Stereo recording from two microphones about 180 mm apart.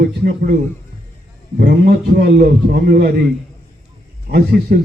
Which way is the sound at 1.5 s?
60° right (ahead or behind).